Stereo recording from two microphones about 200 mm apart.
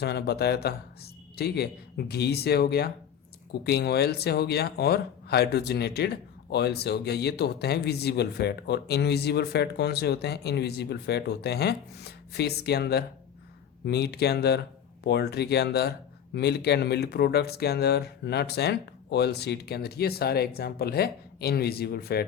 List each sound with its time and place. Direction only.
0.0 s speech: 55° left (ahead or behind)